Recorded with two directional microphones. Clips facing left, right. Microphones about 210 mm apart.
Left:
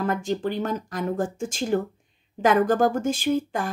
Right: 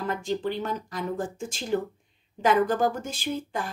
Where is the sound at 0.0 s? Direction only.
50° left (ahead or behind).